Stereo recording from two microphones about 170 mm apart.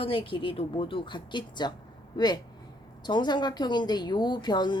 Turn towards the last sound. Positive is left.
turn(degrees=25)  # may be behind; listen again after turning